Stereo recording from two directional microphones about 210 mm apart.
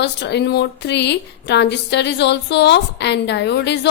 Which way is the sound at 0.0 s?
55° left (ahead or behind).